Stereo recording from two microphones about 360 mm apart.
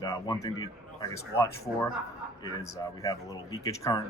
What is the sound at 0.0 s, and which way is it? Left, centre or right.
Speech, centre.